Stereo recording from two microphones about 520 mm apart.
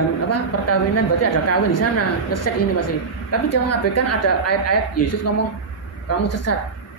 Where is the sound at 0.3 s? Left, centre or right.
Left.